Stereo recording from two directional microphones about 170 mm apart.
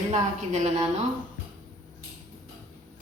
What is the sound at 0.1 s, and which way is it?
Speech, 40° right (ahead or behind).